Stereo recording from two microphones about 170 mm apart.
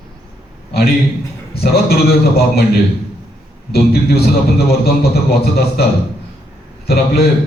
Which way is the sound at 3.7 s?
65° left (ahead or behind).